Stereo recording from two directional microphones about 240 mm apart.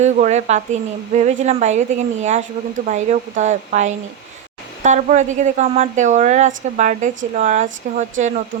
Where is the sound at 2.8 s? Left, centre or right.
Right.